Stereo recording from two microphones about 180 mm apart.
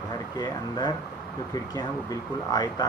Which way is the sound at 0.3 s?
25° left (ahead or behind).